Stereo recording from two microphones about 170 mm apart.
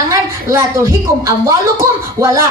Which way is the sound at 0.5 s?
15° right (ahead or behind).